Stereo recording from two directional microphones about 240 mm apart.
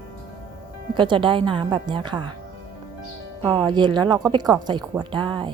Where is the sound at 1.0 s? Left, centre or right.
Centre.